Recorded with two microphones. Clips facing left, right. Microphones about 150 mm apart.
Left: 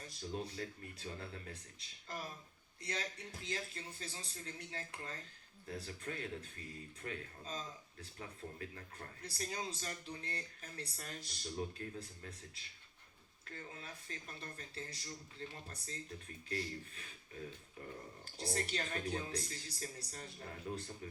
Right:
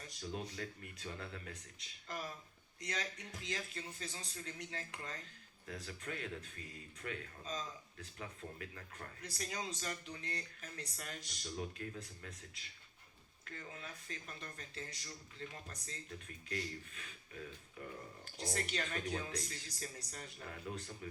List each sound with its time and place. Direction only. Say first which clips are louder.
0.2 s speech: left 1 dB; 35° left (ahead or behind)